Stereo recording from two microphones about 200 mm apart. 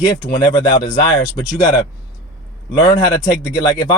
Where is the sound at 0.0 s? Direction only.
20° left (ahead or behind).